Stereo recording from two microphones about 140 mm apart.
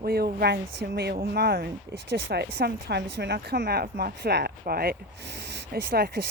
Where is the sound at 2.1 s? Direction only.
90° right.